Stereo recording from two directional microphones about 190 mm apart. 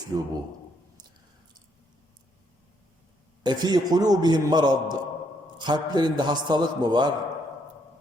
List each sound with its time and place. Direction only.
0.1 s a man's voice: 15° right (ahead or behind)
3.4 s a man's voice: 20° right (ahead or behind)